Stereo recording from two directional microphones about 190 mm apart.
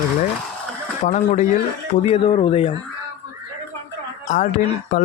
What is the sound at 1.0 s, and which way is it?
Speech, 40° left (ahead or behind).